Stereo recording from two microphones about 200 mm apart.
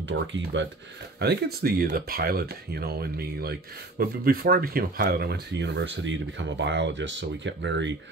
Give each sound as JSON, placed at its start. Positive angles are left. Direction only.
{"t": 0.1, "sound": "speech", "side_deg": -65}
{"t": 1.2, "sound": "speech", "side_deg": -50}